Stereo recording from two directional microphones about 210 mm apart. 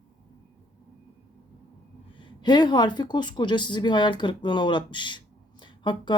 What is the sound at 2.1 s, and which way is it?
Speech, 20° left (ahead or behind).